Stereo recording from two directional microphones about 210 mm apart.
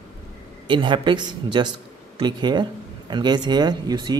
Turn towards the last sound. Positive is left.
turn(degrees=-20)  # may be behind; listen again after turning